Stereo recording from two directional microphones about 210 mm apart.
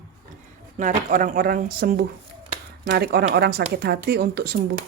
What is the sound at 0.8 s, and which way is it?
Speech, 40° right (ahead or behind).